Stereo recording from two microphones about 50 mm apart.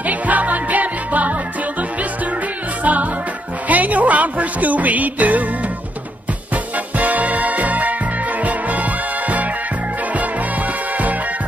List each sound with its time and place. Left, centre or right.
0.0 s music: right
2.8 s music: right
6.5 s music: right